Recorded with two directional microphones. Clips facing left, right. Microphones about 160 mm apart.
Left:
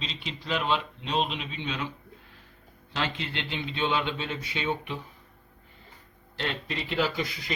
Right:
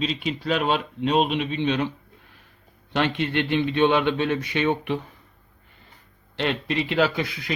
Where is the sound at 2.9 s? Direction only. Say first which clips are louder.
Right 9 dB; 65° right (ahead or behind).